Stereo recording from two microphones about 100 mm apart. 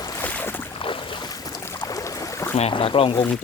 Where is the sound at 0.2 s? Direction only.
20° left (ahead or behind).